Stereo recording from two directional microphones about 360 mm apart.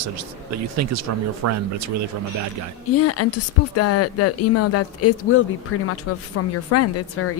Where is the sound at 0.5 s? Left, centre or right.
Right.